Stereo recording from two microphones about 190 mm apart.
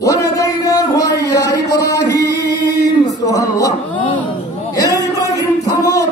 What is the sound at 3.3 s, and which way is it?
Speech, 20° left (ahead or behind).